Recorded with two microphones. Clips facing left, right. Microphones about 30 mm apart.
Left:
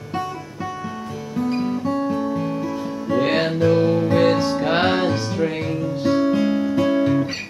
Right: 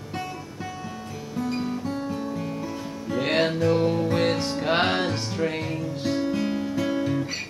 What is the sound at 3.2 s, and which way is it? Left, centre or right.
Music, centre.